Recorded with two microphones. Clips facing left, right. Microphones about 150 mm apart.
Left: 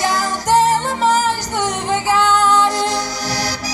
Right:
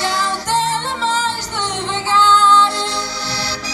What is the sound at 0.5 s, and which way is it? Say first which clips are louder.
Music: left 6 dB; 10° left (ahead or behind).